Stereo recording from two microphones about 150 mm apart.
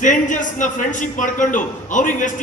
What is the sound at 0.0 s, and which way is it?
A man's voice, 60° left (ahead or behind).